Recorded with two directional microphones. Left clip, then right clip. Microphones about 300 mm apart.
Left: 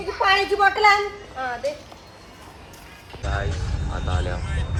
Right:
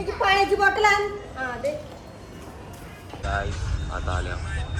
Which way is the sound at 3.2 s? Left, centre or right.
Centre.